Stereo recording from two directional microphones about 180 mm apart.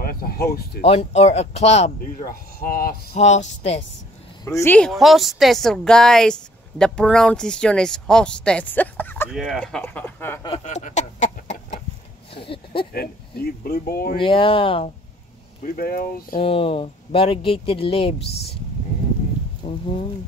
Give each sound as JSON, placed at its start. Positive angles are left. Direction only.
{"t": 0.0, "sound": "a sound", "side_deg": 55}
{"t": 0.8, "sound": "speech", "side_deg": 35}
{"t": 2.1, "sound": "speech", "side_deg": 55}
{"t": 3.2, "sound": "speech", "side_deg": 40}
{"t": 4.5, "sound": "speech", "side_deg": 15}
{"t": 9.3, "sound": "speech", "side_deg": 0}
{"t": 10.6, "sound": "chicken", "side_deg": 40}
{"t": 12.9, "sound": "speech", "side_deg": 60}
{"t": 14.2, "sound": "speech", "side_deg": 30}
{"t": 15.6, "sound": "speech", "side_deg": 55}
{"t": 16.3, "sound": "speech", "side_deg": 30}
{"t": 19.6, "sound": "speech", "side_deg": 30}